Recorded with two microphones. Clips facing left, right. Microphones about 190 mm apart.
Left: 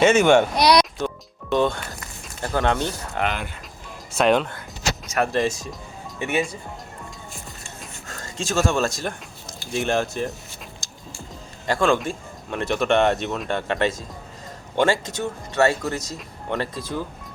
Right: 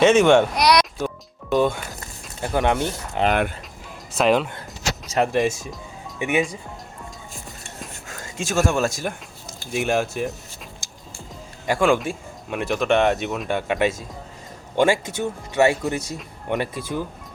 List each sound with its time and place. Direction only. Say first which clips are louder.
0.0 s speech: right 1 dB; centre (ahead or behind)
0.5 s speech: left 1 dB; 30° left (ahead or behind)
0.9 s speech: even; 10° right (ahead or behind)
2.7 s speech: right 2 dB; 25° right (ahead or behind)
3.2 s speech: right 9 dB; 55° right (ahead or behind)
4.2 s speech: even; centre (ahead or behind)
5.1 s speech: right 2 dB; 15° right (ahead or behind)
7.8 s a sound: right 2 dB; 5° right (ahead or behind)
9.7 s speech: right 1 dB; 10° right (ahead or behind)
11.6 s speech: right 1 dB; 10° right (ahead or behind)